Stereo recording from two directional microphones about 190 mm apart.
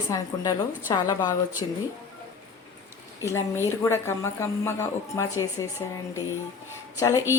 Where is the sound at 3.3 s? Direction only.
15° left (ahead or behind).